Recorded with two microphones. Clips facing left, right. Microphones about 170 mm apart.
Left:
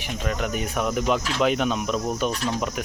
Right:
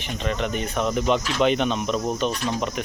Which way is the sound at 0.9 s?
5° left (ahead or behind).